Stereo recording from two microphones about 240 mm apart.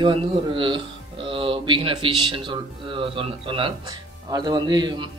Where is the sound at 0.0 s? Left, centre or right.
Right.